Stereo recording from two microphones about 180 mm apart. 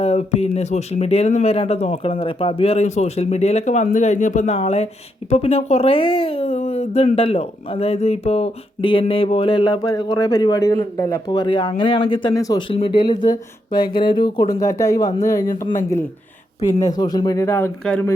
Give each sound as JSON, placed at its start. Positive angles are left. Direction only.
{"t": 0.0, "sound": "a woman's voice", "side_deg": 40}